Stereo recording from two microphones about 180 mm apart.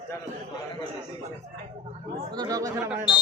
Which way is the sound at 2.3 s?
20° right (ahead or behind).